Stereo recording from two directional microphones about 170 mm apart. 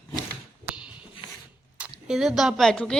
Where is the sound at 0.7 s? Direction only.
5° right (ahead or behind).